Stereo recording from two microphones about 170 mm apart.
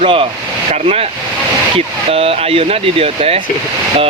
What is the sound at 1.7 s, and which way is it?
Speech, 35° right (ahead or behind).